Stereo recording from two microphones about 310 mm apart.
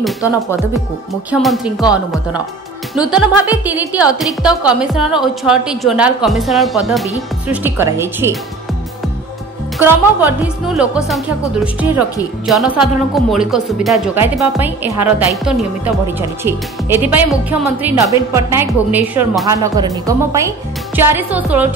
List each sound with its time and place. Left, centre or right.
1.4 s speech: centre
3.1 s a woman's voice: centre
9.8 s a woman's voice: centre